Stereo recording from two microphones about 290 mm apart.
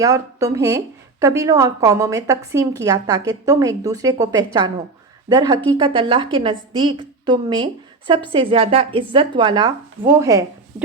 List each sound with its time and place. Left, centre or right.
0.0 s a woman's voice: centre